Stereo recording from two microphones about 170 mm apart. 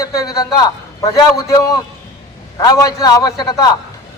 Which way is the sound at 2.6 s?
20° left (ahead or behind).